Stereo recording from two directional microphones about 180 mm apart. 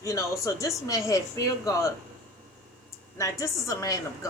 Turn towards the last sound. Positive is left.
turn(degrees=15)  # may be behind; listen again after turning